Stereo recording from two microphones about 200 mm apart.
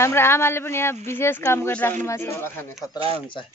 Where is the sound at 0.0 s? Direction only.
10° left (ahead or behind).